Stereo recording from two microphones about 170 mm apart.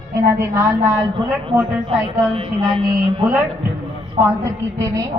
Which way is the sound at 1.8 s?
30° right (ahead or behind).